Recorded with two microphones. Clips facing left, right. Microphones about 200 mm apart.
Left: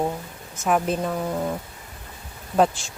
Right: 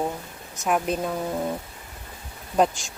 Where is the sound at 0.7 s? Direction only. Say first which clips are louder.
Left 2 dB; centre (ahead or behind).